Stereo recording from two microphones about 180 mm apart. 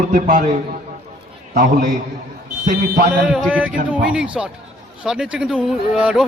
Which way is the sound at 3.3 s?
Centre (ahead or behind).